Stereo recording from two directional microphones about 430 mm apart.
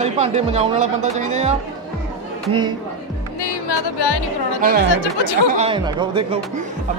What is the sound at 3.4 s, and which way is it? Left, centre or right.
Speech, left.